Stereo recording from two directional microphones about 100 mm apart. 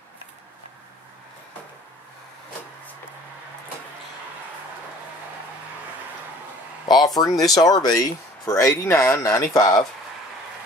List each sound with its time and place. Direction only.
7.2 s speech: 40° left (ahead or behind)